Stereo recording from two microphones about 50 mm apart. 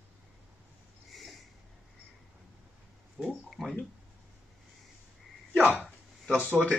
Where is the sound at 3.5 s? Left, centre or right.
Centre.